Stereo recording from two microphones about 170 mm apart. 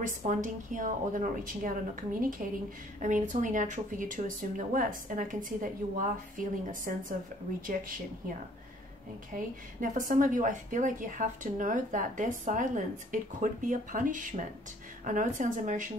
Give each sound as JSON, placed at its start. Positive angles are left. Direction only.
{"t": 0.0, "sound": "a woman's voice", "side_deg": -45}
{"t": 9.3, "sound": "a woman's voice", "side_deg": -50}